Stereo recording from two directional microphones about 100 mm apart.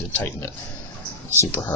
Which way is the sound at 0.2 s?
20° left (ahead or behind).